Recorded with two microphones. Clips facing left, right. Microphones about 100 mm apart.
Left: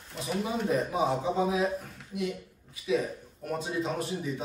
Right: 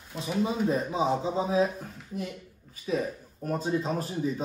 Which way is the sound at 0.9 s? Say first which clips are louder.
Even; 25° right (ahead or behind).